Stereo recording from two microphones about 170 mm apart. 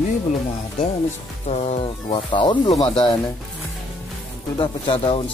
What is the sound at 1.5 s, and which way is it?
Speech, 40° left (ahead or behind).